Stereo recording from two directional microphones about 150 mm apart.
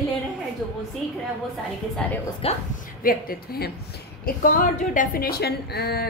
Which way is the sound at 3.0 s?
75° left (ahead or behind).